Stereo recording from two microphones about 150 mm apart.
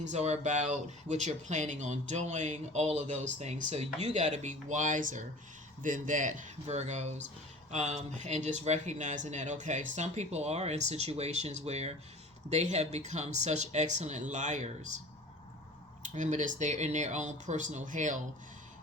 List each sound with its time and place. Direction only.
0.0 s speech: 50° right (ahead or behind)
16.0 s speech: 55° right (ahead or behind)